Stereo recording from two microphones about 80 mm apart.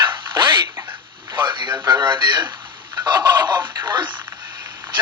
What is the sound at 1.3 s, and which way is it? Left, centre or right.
Radio, right.